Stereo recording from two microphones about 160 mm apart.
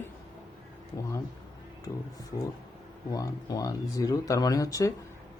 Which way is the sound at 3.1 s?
20° left (ahead or behind).